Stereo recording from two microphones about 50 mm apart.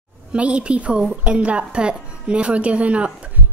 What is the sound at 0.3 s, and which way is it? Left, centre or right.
A woman's voice, right.